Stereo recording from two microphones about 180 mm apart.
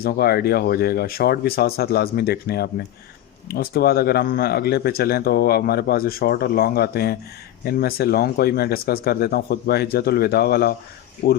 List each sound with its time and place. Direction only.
0.0 s speech: 60° left (ahead or behind)